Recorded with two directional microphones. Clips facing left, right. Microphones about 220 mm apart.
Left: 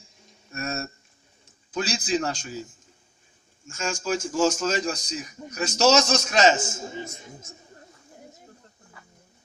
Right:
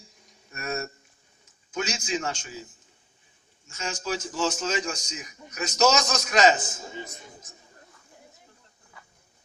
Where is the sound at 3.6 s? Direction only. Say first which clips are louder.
Left 4 dB; 45° left (ahead or behind); by 6.8 s 25° left (ahead or behind).